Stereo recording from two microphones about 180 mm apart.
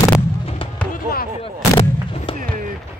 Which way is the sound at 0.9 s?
55° left (ahead or behind).